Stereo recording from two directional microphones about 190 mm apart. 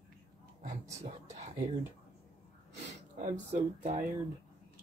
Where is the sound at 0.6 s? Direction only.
40° right (ahead or behind).